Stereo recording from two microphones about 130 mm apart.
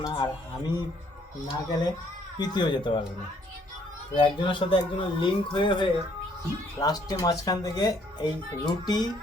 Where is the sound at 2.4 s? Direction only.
35° left (ahead or behind).